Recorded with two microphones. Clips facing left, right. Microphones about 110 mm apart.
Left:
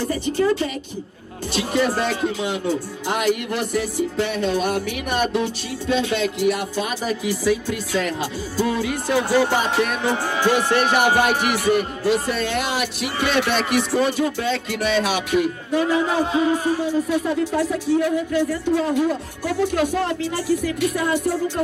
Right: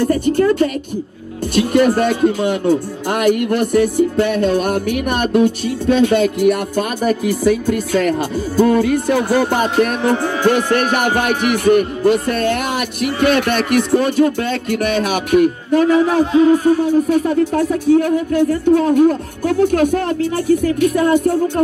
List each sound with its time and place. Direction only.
0.0 s speech: 50° right (ahead or behind)